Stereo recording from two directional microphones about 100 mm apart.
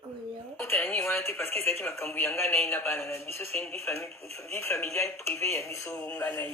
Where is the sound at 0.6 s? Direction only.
20° left (ahead or behind).